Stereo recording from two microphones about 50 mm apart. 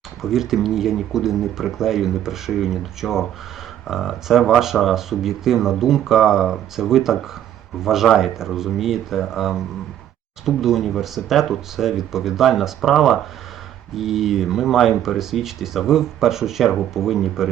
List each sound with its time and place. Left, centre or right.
0.2 s speech: centre
13.9 s speech: centre